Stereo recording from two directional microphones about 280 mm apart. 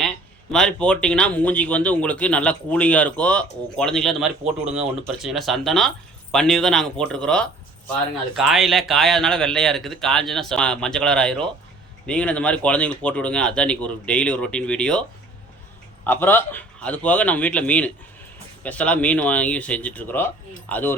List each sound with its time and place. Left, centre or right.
0.5 s speech: centre
16.0 s speech: centre